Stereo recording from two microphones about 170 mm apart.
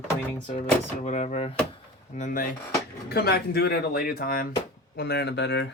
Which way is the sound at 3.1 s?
65° left (ahead or behind).